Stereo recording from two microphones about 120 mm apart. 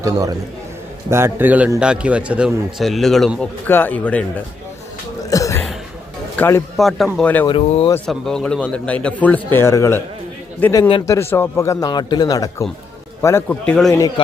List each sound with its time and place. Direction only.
0.0 s a man's voice: 25° right (ahead or behind); by 3.3 s centre (ahead or behind)
3.7 s a man's voice: 15° left (ahead or behind)
5.3 s a sound: 25° left (ahead or behind)
6.3 s a man's voice: 15° left (ahead or behind)
6.7 s a man's voice: centre (ahead or behind)
7.2 s a man's voice: 10° left (ahead or behind)
7.4 s speech: 45° left (ahead or behind)
8.0 s a man's voice: 5° left (ahead or behind); by 10.0 s 25° left (ahead or behind)
10.6 s a man's voice: 15° left (ahead or behind)
11.9 s speech: 35° left (ahead or behind)
13.2 s a man's voice: 20° left (ahead or behind)
13.7 s a man's voice: 5° left (ahead or behind)